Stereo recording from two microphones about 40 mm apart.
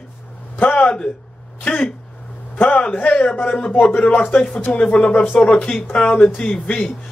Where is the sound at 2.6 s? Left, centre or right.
Left.